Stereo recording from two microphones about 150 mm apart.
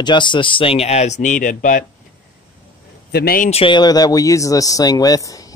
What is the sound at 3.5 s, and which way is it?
Speech, 35° left (ahead or behind).